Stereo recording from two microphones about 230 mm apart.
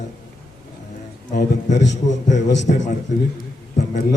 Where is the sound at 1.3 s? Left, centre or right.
Left.